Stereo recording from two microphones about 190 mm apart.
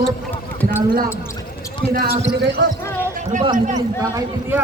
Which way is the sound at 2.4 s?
55° right (ahead or behind).